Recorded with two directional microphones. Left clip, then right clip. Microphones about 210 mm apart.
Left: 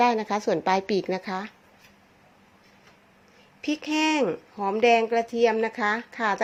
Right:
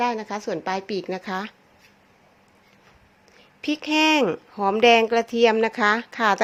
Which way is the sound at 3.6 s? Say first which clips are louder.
Right 5 dB; 5° right (ahead or behind).